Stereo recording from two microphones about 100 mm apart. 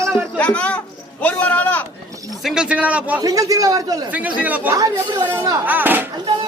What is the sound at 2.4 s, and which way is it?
Speech, 5° right (ahead or behind).